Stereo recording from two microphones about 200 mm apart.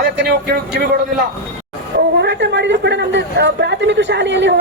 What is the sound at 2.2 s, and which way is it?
A man's voice, 60° right (ahead or behind).